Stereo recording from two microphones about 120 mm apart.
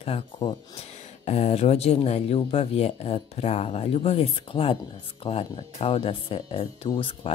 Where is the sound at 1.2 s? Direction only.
60° left (ahead or behind).